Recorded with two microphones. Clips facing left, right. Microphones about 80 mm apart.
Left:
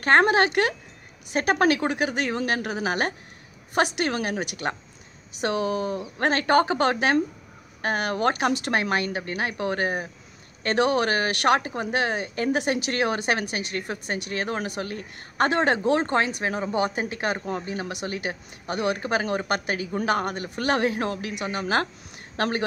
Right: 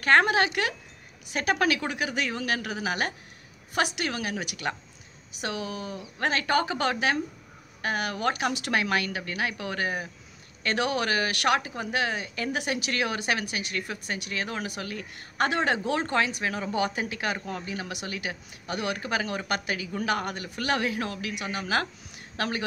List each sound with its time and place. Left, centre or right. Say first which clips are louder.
0.0 s speech: left 3 dB; left